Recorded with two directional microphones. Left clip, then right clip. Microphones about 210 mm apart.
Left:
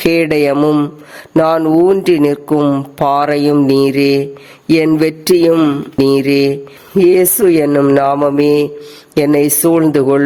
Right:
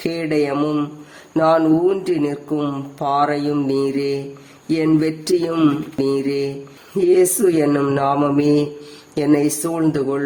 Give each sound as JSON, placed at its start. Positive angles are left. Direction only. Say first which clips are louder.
{"t": 0.0, "sound": "speech", "louder": "left 9 dB", "side_deg": 45}
{"t": 7.1, "sound": "mantra", "louder": "left 3 dB", "side_deg": 45}
{"t": 9.1, "sound": "speech", "louder": "left 6 dB", "side_deg": 40}